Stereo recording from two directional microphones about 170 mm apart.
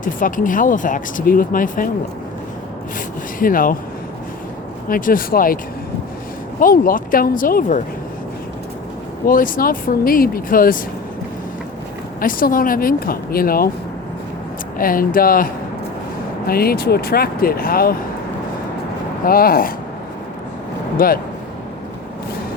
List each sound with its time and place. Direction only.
0.0 s speech: 50° left (ahead or behind)
3.3 s speech: 55° left (ahead or behind)
4.9 s speech: 55° left (ahead or behind)
6.6 s speech: 55° left (ahead or behind)
9.2 s speech: 55° left (ahead or behind)
12.2 s speech: 55° left (ahead or behind)
14.8 s speech: 55° left (ahead or behind)
16.5 s speech: 65° left (ahead or behind)
19.2 s speech: 60° left (ahead or behind)
21.0 s speech: 55° left (ahead or behind)